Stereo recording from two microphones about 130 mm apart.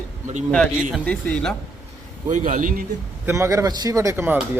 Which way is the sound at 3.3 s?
20° right (ahead or behind).